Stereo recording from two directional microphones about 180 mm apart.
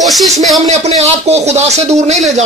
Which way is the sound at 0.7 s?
35° right (ahead or behind).